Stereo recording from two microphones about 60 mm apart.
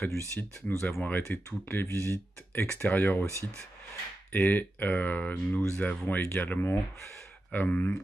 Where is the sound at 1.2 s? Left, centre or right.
Left.